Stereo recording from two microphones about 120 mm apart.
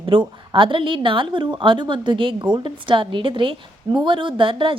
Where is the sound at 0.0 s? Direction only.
45° right (ahead or behind).